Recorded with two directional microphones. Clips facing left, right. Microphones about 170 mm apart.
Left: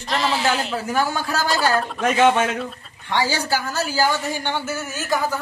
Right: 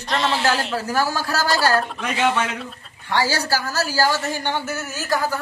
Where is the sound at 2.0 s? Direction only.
45° left (ahead or behind).